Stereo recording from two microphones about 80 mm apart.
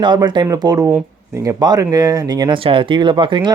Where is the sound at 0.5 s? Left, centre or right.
Right.